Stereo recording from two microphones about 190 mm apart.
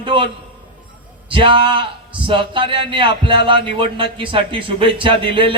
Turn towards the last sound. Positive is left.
turn(degrees=-25)  # may be behind; listen again after turning